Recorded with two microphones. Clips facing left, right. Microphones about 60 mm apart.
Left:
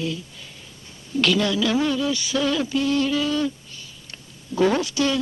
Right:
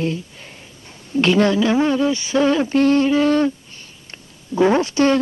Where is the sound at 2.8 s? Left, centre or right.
Right.